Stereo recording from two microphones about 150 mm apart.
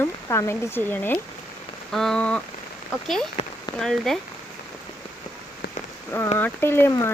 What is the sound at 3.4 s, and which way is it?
Rain on surface, 45° left (ahead or behind).